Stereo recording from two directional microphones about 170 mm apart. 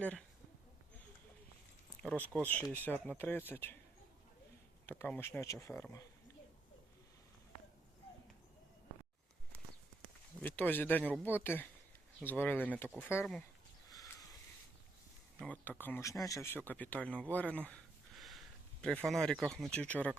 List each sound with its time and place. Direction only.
0.0 s speech: 5° left (ahead or behind)
2.0 s speech: 10° left (ahead or behind)
4.9 s speech: 10° left (ahead or behind)
10.4 s speech: 10° left (ahead or behind)
13.9 s a sound: 20° left (ahead or behind)
15.4 s speech: 10° left (ahead or behind)